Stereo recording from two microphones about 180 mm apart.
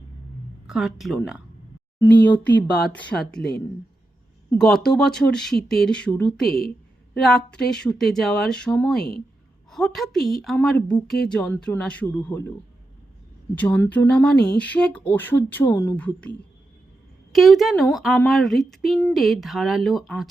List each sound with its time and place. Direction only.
0.7 s speech: centre (ahead or behind)
2.2 s speech: 10° left (ahead or behind)
4.6 s speech: 5° left (ahead or behind)
13.6 s speech: 10° left (ahead or behind)
14.3 s speech: 60° left (ahead or behind)
14.6 s speech: 5° left (ahead or behind)
17.3 s speech: centre (ahead or behind)